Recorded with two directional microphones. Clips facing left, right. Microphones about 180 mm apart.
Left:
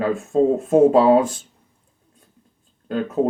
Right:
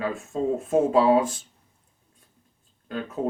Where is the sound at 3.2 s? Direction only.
40° left (ahead or behind).